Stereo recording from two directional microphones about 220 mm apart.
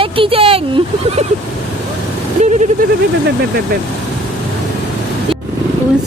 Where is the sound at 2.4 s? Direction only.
35° right (ahead or behind).